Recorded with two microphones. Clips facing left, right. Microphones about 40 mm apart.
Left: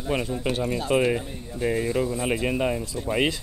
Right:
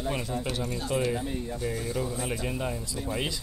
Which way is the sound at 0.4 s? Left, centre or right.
Left.